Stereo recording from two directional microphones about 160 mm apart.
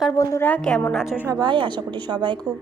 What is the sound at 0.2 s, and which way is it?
Speech, 20° left (ahead or behind).